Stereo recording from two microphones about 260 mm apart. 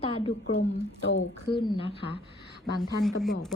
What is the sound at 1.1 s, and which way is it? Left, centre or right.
Speech, left.